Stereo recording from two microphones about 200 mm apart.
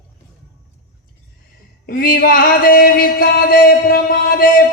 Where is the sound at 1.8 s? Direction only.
45° left (ahead or behind).